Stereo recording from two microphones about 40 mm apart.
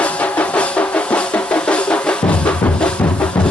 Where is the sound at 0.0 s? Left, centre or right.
Left.